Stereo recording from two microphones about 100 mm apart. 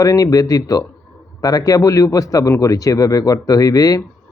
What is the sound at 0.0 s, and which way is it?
Speech, 35° left (ahead or behind).